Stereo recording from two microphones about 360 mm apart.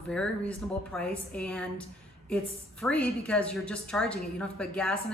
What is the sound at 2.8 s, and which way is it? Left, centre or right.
A woman's voice, centre.